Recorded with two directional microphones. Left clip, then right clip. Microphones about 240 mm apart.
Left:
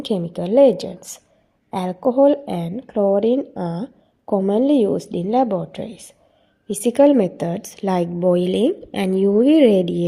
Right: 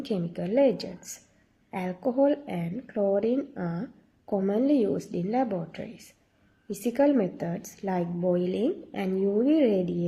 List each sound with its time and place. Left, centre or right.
0.0 s a woman's voice: left